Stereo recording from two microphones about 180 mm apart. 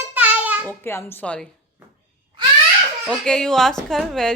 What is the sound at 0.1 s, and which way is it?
Babbling, 10° right (ahead or behind).